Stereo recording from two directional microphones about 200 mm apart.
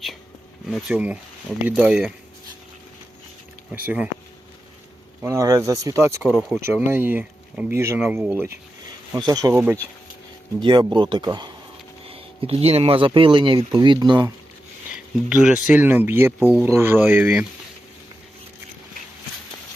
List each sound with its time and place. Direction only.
0.7 s speech: 5° right (ahead or behind)
3.8 s speech: 5° right (ahead or behind)
5.2 s speech: 15° right (ahead or behind)
6.2 s speech: centre (ahead or behind)
10.6 s speech: 25° right (ahead or behind)
14.9 s speech: 5° right (ahead or behind)